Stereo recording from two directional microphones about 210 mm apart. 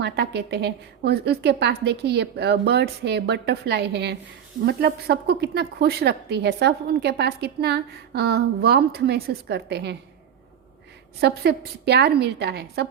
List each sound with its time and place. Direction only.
0.0 s a woman's voice: 50° right (ahead or behind)
11.2 s a woman's voice: 50° right (ahead or behind)